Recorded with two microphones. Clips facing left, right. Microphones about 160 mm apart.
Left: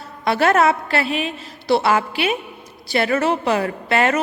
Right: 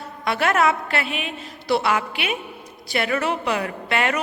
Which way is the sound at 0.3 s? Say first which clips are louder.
Left 4 dB; 35° left (ahead or behind).